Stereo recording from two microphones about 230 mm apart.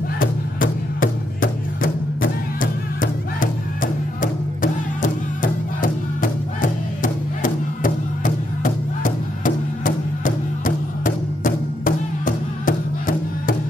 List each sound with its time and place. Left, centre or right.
0.2 s music: left